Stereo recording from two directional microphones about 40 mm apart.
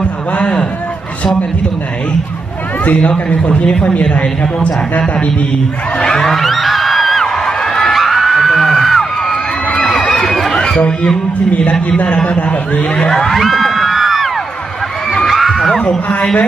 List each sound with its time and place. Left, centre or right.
0.4 s a sound: left
3.0 s a man's voice: left
5.9 s music: centre
7.4 s crowd: centre
7.9 s music: centre
9.9 s crowd: centre
10.3 s a sound: centre
10.6 s a sound: centre
12.3 s speech: left
12.9 s crowd: centre
13.3 s crowd: centre
15.2 s heart sounds: centre